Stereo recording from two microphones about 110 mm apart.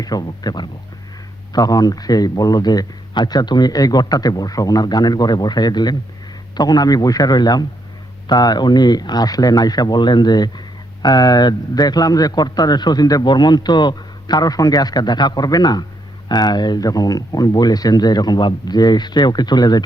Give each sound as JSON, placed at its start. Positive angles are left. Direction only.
{"t": 0.0, "sound": "speech", "side_deg": 35}